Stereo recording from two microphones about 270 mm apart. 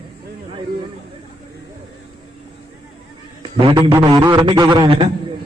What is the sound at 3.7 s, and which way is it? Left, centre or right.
A man's voice, centre.